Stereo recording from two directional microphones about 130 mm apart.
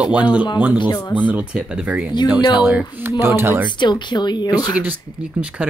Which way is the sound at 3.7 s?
35° left (ahead or behind).